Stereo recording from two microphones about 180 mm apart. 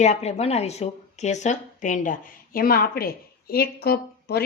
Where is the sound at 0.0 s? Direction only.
40° left (ahead or behind).